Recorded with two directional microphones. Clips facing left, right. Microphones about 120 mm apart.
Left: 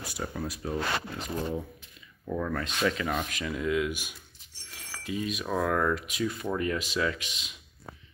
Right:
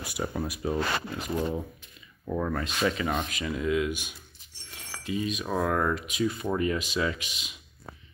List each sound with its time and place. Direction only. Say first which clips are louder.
0.0 s speech: right 3 dB; 15° right (ahead or behind)
2.6 s speech: right 1 dB; 5° right (ahead or behind)